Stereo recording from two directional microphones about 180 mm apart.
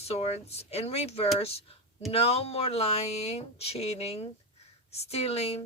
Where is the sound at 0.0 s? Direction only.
35° left (ahead or behind).